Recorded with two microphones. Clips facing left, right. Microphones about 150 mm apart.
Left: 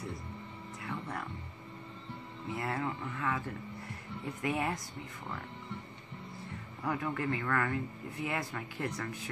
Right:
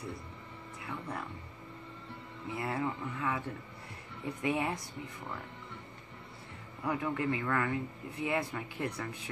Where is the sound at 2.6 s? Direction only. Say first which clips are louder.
Right 2 dB; 15° right (ahead or behind).